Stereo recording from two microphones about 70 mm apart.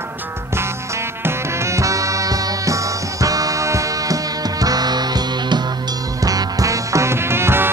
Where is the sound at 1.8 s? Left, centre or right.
Right.